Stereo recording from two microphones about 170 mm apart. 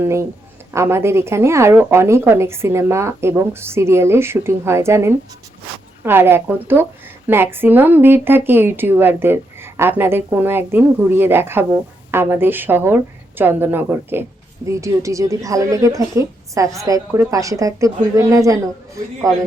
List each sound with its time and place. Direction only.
0.0 s a woman's voice: 15° right (ahead or behind)